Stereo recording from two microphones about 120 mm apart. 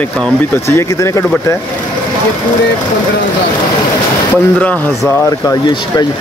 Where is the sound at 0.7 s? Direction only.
25° left (ahead or behind).